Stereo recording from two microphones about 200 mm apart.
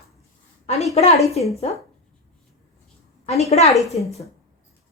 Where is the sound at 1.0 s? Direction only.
30° left (ahead or behind).